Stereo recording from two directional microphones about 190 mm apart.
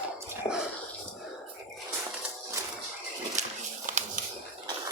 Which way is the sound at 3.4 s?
40° right (ahead or behind).